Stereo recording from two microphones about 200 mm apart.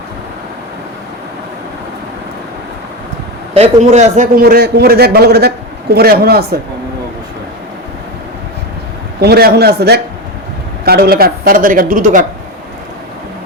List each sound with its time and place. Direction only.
3.5 s a man's voice: 35° right (ahead or behind); by 6.4 s 50° right (ahead or behind)
9.2 s a man's voice: 55° right (ahead or behind)